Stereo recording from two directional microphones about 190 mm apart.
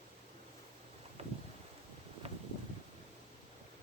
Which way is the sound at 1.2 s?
35° right (ahead or behind).